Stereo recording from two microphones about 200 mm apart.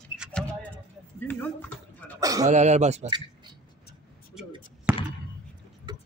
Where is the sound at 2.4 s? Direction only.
35° right (ahead or behind).